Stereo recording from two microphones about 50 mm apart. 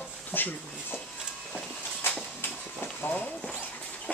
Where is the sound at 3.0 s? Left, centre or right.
Left.